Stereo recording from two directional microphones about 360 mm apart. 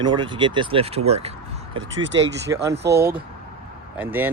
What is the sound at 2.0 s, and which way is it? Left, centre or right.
Speech, right.